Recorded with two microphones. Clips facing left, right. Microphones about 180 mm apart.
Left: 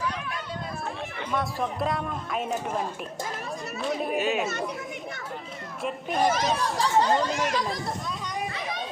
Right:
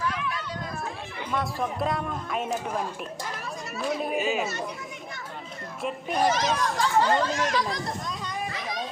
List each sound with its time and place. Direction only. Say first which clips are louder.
1.3 s speech: even; centre (ahead or behind)
5.8 s speech: even; centre (ahead or behind)
6.7 s speech: left 1 dB; 15° left (ahead or behind)
7.3 s speech: even; 5° left (ahead or behind)